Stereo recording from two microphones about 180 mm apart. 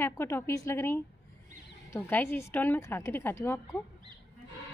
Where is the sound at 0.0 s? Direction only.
15° left (ahead or behind).